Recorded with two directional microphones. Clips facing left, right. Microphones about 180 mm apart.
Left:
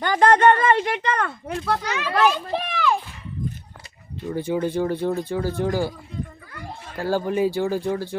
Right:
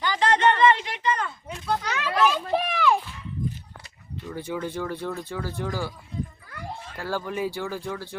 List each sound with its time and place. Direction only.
0.0 s speech: 55° left (ahead or behind)
1.9 s children playing: centre (ahead or behind)
4.3 s speech: 30° left (ahead or behind)
7.0 s speech: 30° left (ahead or behind)